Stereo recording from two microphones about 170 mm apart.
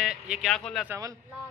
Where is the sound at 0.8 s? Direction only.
15° right (ahead or behind).